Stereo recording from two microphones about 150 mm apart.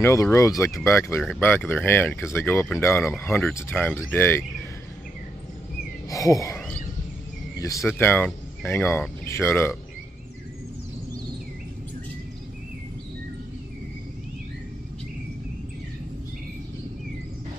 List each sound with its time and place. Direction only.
0.0 s speech: 20° left (ahead or behind)
6.0 s speech: 20° left (ahead or behind)